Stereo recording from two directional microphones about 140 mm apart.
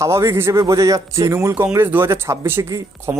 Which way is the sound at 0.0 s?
20° right (ahead or behind).